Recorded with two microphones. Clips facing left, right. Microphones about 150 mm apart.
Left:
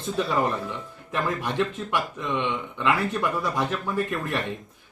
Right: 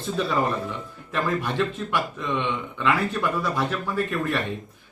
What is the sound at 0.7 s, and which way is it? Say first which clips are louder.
Speech: right 1 dB; 15° left (ahead or behind).